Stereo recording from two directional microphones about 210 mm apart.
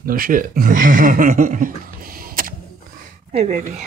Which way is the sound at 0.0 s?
45° right (ahead or behind).